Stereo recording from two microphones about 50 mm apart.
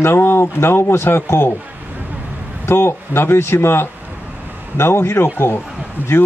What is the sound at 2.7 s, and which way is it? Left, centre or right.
Speech, left.